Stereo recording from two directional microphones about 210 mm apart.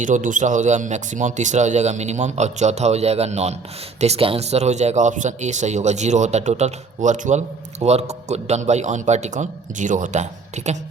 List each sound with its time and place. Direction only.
0.0 s speech: 35° right (ahead or behind)